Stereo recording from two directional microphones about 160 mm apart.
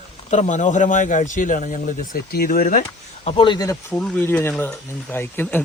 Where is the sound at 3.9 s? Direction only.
5° left (ahead or behind).